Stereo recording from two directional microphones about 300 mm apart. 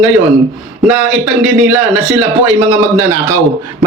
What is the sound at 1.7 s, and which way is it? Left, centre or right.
A man's voice, centre.